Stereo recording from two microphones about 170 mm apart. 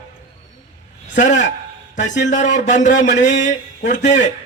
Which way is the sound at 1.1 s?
45° left (ahead or behind).